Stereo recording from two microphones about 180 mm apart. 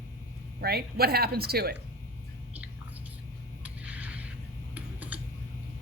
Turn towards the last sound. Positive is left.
turn(degrees=-10)  # may be behind; listen again after turning